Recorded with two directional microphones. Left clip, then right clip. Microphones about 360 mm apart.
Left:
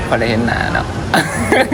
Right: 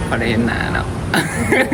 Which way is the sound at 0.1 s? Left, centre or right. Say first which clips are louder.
Left 4 dB; centre.